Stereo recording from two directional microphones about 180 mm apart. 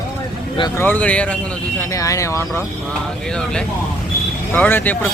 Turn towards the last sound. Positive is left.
turn(degrees=10)  # may be behind; listen again after turning